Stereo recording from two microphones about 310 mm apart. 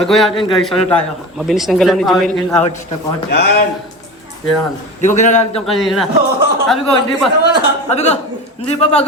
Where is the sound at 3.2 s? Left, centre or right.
Left.